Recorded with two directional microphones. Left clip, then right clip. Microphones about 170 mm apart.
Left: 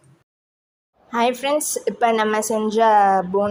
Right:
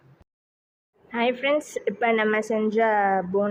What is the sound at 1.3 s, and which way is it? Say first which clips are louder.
A woman's voice: left 2 dB; 15° left (ahead or behind).